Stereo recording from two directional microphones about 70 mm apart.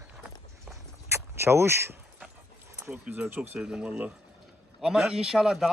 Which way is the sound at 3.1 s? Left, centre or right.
Right.